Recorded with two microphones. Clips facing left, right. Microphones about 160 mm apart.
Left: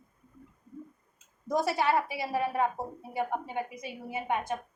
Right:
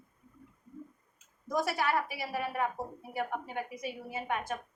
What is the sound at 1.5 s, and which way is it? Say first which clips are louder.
A woman's voice: left 4 dB; 20° left (ahead or behind).